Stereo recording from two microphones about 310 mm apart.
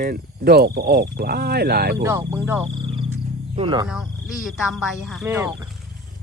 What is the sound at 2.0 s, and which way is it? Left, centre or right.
Speech, centre.